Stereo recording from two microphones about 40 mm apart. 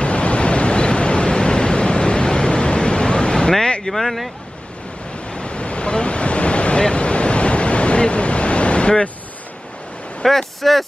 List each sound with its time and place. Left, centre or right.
0.0 s waves: left
3.8 s speech: centre
5.3 s a sound: left
10.2 s vehicle: centre